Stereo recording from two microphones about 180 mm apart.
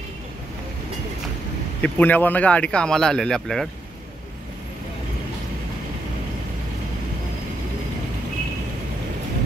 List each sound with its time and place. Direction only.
1.8 s speech: 10° left (ahead or behind)